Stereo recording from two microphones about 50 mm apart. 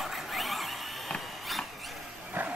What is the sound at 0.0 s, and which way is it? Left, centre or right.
Vehicle, centre.